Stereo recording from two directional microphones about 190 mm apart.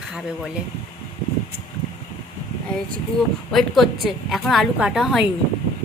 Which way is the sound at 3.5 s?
Centre (ahead or behind).